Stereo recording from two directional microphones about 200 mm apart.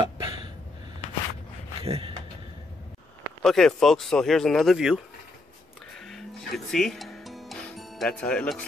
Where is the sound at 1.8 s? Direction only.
30° right (ahead or behind).